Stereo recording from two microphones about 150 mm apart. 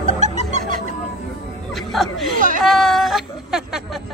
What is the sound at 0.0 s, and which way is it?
Music, 50° right (ahead or behind).